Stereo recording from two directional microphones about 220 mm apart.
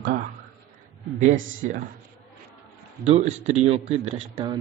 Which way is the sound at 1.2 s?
35° right (ahead or behind).